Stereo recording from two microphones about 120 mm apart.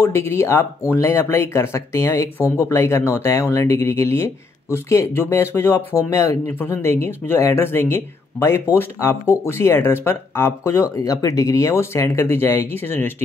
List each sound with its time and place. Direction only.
0.0 s speech: 20° left (ahead or behind)